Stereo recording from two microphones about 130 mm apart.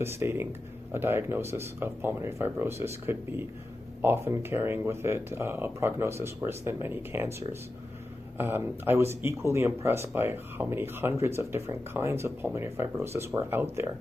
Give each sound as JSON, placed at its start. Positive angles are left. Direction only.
{"t": 0.0, "sound": "speech", "side_deg": -20}